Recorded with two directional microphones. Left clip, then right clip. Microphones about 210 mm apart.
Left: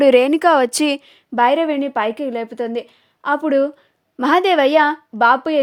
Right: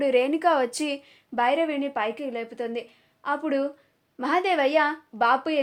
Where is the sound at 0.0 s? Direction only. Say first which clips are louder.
Left 10 dB; 50° left (ahead or behind).